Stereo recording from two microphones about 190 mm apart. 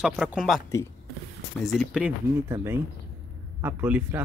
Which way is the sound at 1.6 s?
Centre (ahead or behind).